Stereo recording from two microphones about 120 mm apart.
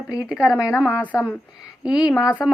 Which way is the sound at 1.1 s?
25° left (ahead or behind).